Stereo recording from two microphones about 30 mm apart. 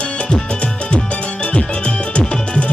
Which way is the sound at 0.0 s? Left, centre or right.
Left.